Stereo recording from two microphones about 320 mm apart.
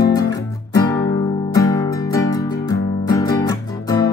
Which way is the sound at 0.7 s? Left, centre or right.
Centre.